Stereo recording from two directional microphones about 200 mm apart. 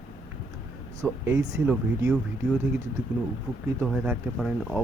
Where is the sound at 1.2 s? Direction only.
10° right (ahead or behind).